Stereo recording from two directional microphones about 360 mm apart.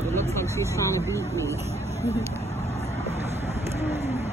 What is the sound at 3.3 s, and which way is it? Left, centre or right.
Vehicle, centre.